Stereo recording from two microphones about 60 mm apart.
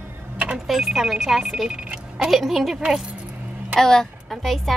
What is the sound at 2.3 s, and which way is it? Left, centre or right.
Speech, centre.